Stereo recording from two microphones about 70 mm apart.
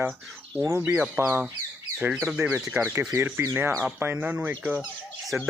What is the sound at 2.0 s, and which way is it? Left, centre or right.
Speech, right.